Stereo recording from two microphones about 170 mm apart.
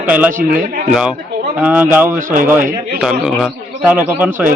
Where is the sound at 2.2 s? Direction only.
50° right (ahead or behind).